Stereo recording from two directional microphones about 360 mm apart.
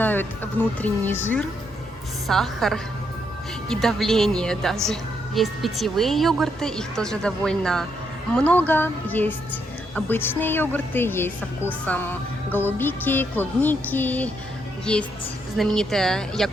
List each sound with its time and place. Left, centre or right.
0.0 s music: centre
0.8 s a woman's voice: centre